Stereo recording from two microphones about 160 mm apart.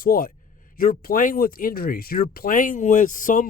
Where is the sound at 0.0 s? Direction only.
65° left (ahead or behind).